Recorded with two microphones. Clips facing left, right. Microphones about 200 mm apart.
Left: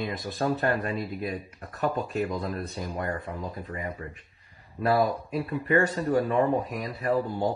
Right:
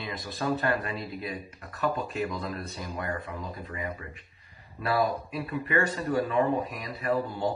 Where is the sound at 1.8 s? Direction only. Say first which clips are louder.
Left 2 dB; 20° left (ahead or behind).